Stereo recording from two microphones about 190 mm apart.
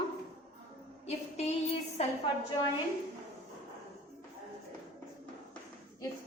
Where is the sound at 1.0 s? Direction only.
35° left (ahead or behind).